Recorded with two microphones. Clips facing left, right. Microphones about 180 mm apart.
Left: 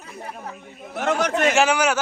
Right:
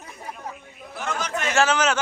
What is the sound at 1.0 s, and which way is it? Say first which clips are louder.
Speech: left 8 dB; 60° left (ahead or behind).